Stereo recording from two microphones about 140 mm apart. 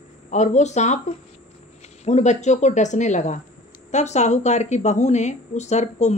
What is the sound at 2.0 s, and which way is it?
A woman's voice, 55° left (ahead or behind).